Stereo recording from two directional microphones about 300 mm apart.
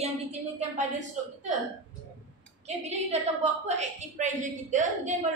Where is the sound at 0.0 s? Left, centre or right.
Right.